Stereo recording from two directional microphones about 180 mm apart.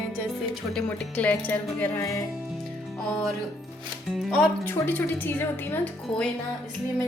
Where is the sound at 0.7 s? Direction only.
10° left (ahead or behind).